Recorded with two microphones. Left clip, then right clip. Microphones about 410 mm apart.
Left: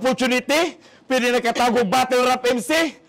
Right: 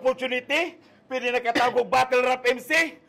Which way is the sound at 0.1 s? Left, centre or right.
Left.